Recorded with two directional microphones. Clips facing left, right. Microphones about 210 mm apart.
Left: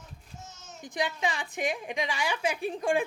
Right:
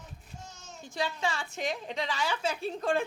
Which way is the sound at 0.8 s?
15° left (ahead or behind).